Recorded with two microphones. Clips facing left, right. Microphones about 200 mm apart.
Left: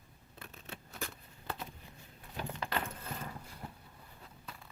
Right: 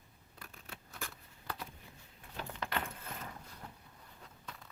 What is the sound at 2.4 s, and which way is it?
Door, 15° left (ahead or behind).